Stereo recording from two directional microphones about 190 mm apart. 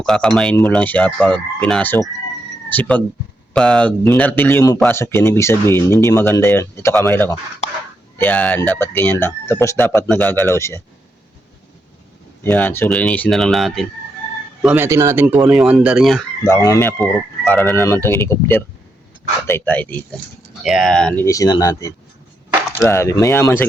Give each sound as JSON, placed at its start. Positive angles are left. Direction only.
{"t": 0.0, "sound": "speech", "side_deg": 5}
{"t": 12.4, "sound": "speech", "side_deg": 10}
{"t": 16.4, "sound": "speech", "side_deg": 15}
{"t": 21.2, "sound": "speech", "side_deg": 20}